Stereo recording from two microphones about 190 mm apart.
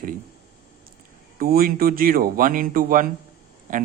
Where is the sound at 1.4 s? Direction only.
50° right (ahead or behind).